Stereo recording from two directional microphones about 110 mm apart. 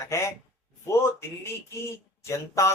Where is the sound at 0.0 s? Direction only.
25° left (ahead or behind).